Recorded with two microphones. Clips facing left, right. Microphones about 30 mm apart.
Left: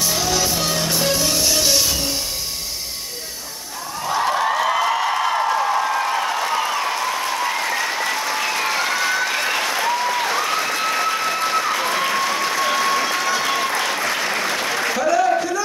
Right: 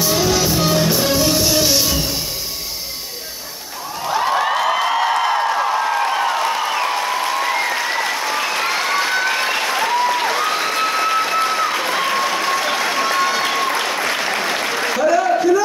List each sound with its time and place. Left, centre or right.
0.0 s music: centre
4.1 s a sound: centre
5.5 s a sound: centre
6.7 s applause: centre
9.5 s applause: centre
13.2 s applause: right
13.5 s applause: centre